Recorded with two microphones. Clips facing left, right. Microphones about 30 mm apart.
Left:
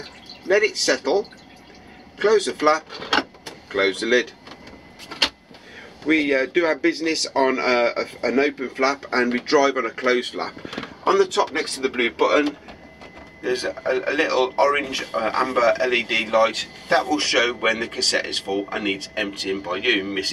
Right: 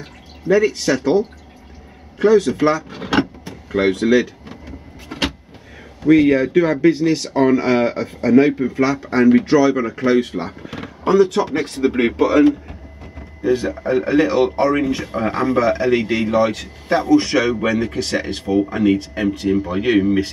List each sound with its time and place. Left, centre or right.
0.4 s speech: left
2.1 s power windows: left
6.0 s a man's voice: left
18.6 s speech: left
19.2 s a man's voice: left